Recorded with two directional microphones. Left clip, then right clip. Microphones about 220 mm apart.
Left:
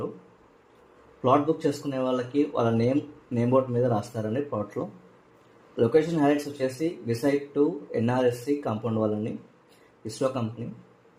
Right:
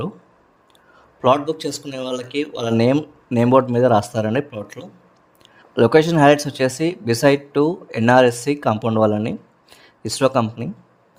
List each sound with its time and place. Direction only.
1.2 s speech: 50° right (ahead or behind)
5.7 s speech: 45° right (ahead or behind)